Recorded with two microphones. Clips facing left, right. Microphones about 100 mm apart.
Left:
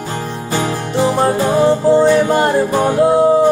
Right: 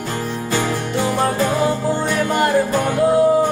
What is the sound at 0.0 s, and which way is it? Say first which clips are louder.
Music: left 1 dB; 25° left (ahead or behind).